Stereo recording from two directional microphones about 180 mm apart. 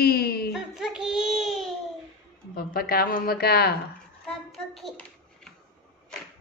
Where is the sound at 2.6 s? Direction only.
55° left (ahead or behind).